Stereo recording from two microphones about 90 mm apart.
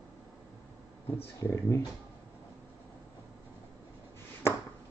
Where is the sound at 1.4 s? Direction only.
35° left (ahead or behind).